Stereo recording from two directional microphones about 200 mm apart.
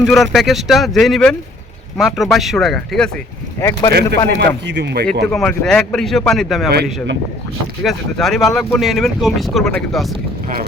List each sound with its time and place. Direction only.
0.0 s speech: centre (ahead or behind)
3.6 s speech: 15° left (ahead or behind)
4.4 s speech: 60° right (ahead or behind)
5.2 s speech: centre (ahead or behind)
7.9 s speech: centre (ahead or behind)